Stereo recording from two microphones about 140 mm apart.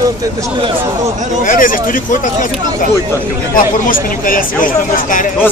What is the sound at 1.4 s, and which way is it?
Speech, 80° left.